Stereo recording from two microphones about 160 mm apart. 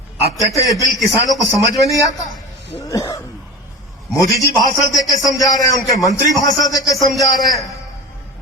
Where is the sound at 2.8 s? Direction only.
20° left (ahead or behind).